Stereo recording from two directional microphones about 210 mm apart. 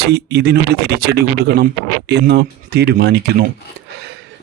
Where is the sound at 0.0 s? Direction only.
50° right (ahead or behind).